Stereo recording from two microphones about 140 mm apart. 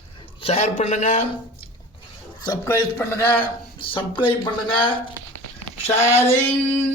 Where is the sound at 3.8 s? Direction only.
35° left (ahead or behind).